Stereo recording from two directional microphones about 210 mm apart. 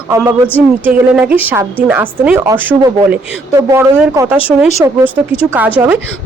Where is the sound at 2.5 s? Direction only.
15° right (ahead or behind).